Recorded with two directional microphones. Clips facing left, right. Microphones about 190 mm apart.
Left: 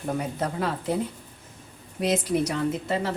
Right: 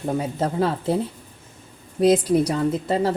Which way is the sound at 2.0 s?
35° right (ahead or behind).